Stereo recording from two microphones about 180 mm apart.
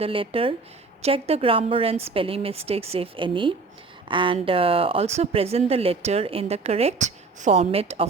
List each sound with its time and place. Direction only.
0.0 s speech: 30° right (ahead or behind)